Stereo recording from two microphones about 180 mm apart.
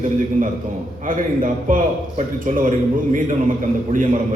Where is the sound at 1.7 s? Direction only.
45° right (ahead or behind).